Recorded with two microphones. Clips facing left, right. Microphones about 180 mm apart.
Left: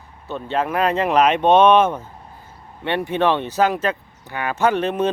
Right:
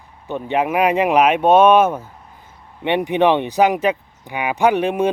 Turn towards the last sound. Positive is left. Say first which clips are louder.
# right 2 dB
turn(degrees=-10)  # may be behind; listen again after turning